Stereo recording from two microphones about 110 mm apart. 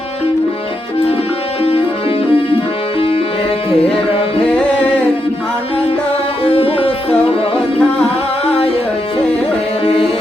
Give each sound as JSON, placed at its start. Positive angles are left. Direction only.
{"t": 1.6, "sound": "music", "side_deg": 60}
{"t": 3.8, "sound": "music", "side_deg": 60}
{"t": 4.4, "sound": "music", "side_deg": 10}
{"t": 6.4, "sound": "music", "side_deg": 60}